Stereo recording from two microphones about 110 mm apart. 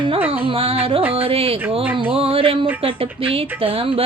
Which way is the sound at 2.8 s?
55° right (ahead or behind).